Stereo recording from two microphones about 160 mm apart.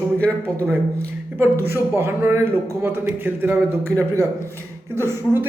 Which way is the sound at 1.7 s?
15° right (ahead or behind).